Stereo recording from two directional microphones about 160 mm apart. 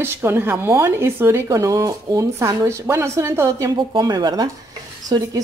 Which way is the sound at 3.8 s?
25° right (ahead or behind).